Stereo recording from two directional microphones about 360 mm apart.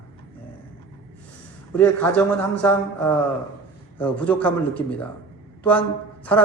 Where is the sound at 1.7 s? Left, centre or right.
Centre.